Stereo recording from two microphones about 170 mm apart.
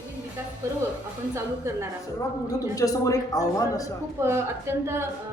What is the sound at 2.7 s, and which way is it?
Speech, 20° left (ahead or behind).